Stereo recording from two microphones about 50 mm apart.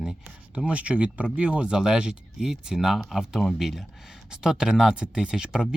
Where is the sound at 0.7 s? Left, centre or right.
Right.